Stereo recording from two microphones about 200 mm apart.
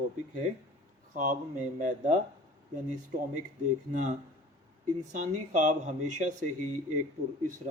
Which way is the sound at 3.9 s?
35° right (ahead or behind).